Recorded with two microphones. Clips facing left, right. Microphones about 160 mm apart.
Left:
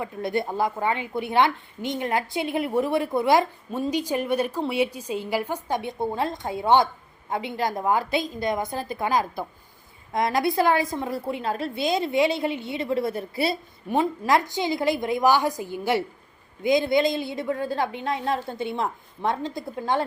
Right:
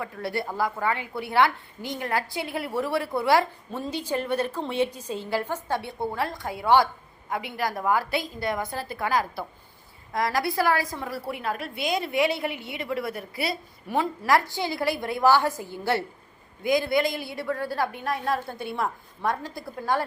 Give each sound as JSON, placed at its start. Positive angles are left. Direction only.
{"t": 0.0, "sound": "a woman's voice", "side_deg": 20}